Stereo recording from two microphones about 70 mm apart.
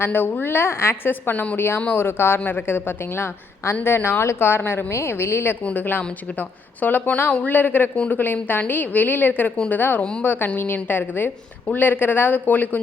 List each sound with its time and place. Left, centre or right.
0.0 s a woman's voice: left
5.6 s a woman's voice: left